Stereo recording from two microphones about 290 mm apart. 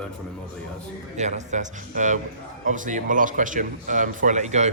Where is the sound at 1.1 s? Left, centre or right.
Right.